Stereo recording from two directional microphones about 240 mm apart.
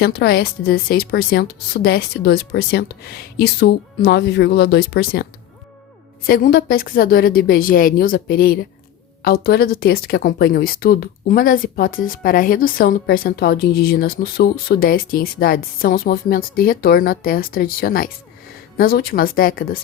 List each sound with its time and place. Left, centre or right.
0.0 s speech: left